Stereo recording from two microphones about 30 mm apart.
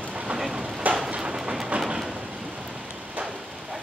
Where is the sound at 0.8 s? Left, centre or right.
Right.